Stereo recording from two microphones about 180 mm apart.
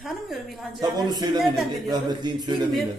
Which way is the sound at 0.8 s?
20° right (ahead or behind).